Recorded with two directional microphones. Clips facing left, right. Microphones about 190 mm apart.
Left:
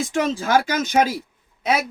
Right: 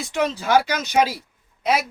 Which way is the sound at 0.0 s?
45° left (ahead or behind).